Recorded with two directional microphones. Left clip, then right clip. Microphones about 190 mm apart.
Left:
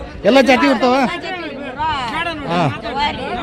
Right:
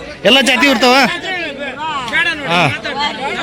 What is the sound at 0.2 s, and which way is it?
Speech, centre (ahead or behind).